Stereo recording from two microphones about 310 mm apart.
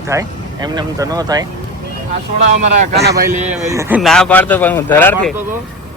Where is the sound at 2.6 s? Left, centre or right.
Right.